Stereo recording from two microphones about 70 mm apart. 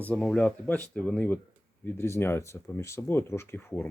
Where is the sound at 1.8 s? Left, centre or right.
Left.